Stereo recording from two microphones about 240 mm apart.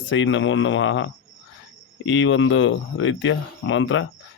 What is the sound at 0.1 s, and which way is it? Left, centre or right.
Speech, left.